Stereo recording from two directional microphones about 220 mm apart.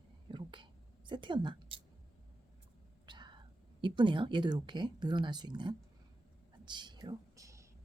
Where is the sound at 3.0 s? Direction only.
20° right (ahead or behind).